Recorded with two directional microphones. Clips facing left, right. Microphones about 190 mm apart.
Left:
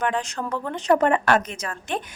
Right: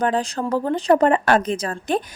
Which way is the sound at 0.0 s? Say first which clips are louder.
Right 4 dB; 35° right (ahead or behind).